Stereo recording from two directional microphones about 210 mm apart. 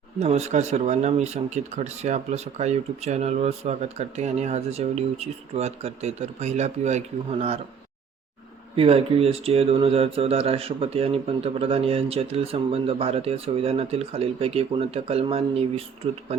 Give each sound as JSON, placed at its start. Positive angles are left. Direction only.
{"t": 0.2, "sound": "speech", "side_deg": -30}
{"t": 8.7, "sound": "speech", "side_deg": -25}